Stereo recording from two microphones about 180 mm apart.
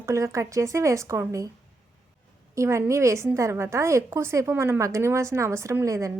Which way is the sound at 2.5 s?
15° right (ahead or behind).